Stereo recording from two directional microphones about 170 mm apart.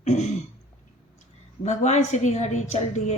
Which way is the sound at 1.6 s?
40° left (ahead or behind).